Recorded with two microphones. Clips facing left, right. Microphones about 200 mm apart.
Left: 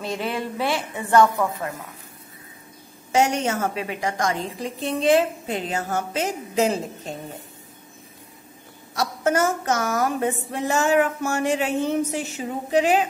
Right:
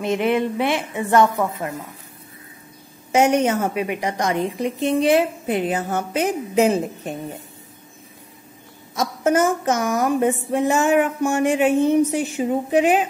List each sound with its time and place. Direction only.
0.0 s a sound: 20° right (ahead or behind)
3.1 s a woman's voice: 20° right (ahead or behind)
9.2 s a woman's voice: 20° right (ahead or behind)